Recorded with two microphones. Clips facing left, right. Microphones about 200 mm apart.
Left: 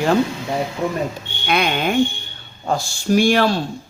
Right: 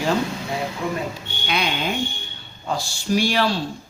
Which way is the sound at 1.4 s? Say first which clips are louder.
Left 5 dB; 55° left (ahead or behind).